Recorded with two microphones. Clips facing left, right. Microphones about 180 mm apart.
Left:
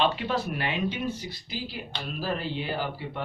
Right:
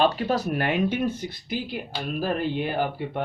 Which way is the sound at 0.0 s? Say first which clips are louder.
Right 4 dB; 40° right (ahead or behind).